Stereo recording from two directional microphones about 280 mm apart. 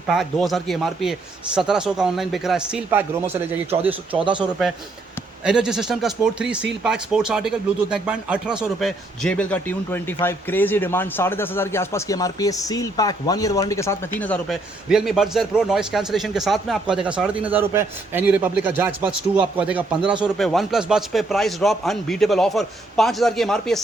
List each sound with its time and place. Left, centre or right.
0.1 s a man's voice: centre
5.5 s a man's voice: centre